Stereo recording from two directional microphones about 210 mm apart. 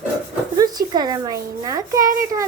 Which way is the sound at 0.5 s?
20° right (ahead or behind).